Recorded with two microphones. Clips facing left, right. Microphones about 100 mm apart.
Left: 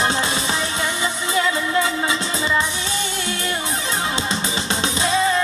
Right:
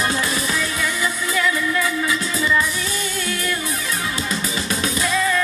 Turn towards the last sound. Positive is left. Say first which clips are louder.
# left 1 dB
turn(degrees=25)  # may be behind; listen again after turning